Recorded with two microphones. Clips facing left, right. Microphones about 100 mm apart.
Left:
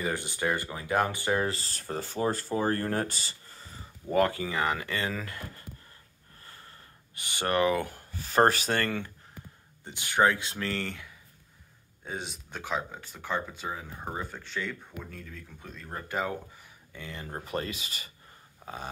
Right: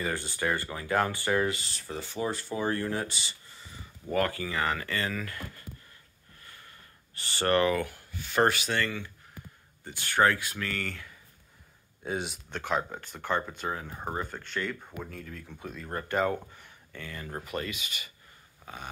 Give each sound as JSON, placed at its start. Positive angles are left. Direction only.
{"t": 0.0, "sound": "speech", "side_deg": 20}
{"t": 1.4, "sound": "speech", "side_deg": 35}
{"t": 4.1, "sound": "speech", "side_deg": 25}
{"t": 6.4, "sound": "gasp", "side_deg": 30}
{"t": 7.2, "sound": "speech", "side_deg": 15}
{"t": 7.8, "sound": "speech", "side_deg": 35}
{"t": 9.8, "sound": "speech", "side_deg": 15}
{"t": 12.0, "sound": "speech", "side_deg": -5}
{"t": 17.0, "sound": "speech", "side_deg": 25}
{"t": 18.6, "sound": "a sound", "side_deg": 25}